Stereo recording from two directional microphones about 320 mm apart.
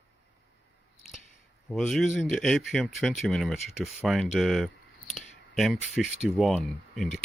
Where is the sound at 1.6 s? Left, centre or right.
Centre.